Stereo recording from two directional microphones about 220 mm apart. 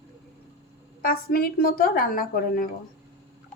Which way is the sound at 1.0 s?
45° left (ahead or behind).